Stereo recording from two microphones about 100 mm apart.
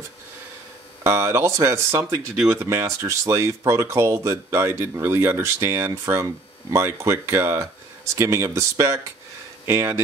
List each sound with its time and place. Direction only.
1.0 s speech: 30° right (ahead or behind)